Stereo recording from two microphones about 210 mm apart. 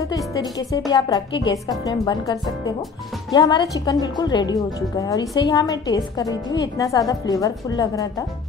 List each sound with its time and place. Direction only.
0.3 s a woman's voice: 15° left (ahead or behind)
3.3 s a woman's voice: 20° left (ahead or behind)